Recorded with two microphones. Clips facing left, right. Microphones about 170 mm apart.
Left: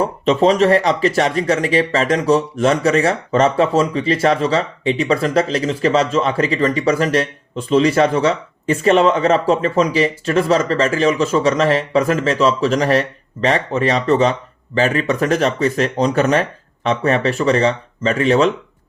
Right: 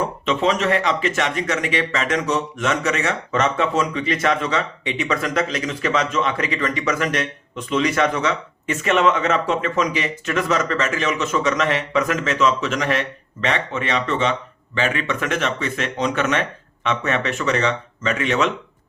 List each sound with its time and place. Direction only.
0.0 s speech: 35° left (ahead or behind)